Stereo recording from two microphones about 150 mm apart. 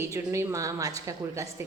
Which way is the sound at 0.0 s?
20° right (ahead or behind).